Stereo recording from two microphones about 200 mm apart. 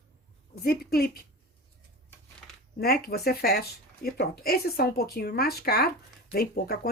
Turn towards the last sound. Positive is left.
turn(degrees=50)  # may be behind; listen again after turning